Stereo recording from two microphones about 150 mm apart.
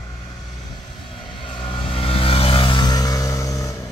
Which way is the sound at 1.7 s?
40° left (ahead or behind).